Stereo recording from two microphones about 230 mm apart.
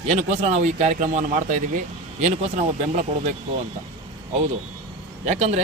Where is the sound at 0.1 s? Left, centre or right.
Right.